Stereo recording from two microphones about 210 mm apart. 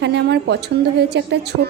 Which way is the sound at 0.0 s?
55° right (ahead or behind).